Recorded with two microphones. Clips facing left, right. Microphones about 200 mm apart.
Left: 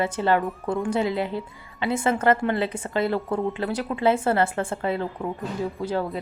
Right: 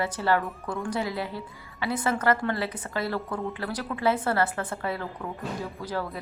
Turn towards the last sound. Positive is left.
turn(degrees=20)  # may be behind; listen again after turning